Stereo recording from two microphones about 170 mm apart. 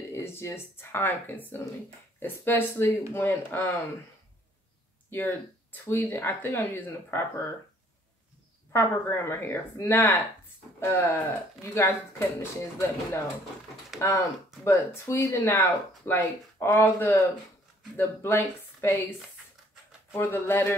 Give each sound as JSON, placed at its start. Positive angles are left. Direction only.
{"t": 0.1, "sound": "speech", "side_deg": 15}
{"t": 5.1, "sound": "speech", "side_deg": 10}
{"t": 8.7, "sound": "speech", "side_deg": 15}
{"t": 20.2, "sound": "speech", "side_deg": 15}